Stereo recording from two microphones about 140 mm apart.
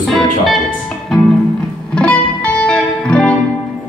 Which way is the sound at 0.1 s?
Centre (ahead or behind).